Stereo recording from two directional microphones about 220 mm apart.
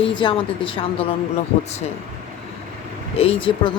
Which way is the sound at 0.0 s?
20° left (ahead or behind).